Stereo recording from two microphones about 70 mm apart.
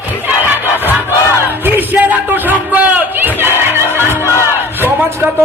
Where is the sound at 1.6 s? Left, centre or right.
Right.